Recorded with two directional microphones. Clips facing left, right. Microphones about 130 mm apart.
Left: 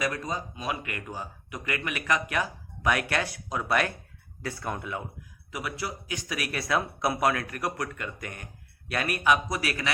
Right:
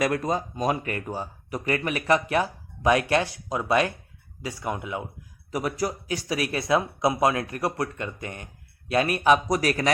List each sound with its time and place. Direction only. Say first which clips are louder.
0.0 s speech: right 6 dB; 50° right (ahead or behind); by 5.0 s 20° right (ahead or behind)
5.5 s speech: right 7 dB; 40° right (ahead or behind)